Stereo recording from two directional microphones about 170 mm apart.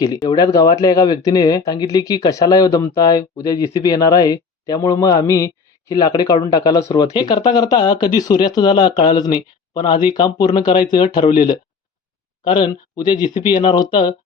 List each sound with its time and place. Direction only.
0.0 s speech: 20° left (ahead or behind)